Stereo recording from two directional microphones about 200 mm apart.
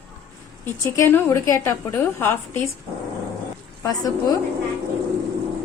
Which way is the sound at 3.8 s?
20° left (ahead or behind).